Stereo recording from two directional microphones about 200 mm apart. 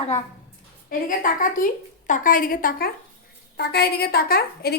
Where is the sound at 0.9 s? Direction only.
45° left (ahead or behind).